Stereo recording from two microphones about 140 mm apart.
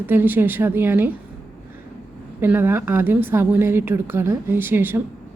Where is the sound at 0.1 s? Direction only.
15° right (ahead or behind).